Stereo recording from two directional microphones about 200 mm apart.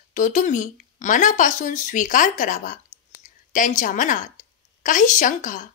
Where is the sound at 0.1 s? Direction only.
40° left (ahead or behind).